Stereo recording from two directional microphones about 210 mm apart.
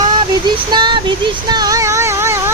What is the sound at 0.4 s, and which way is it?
Child singing, 20° right (ahead or behind).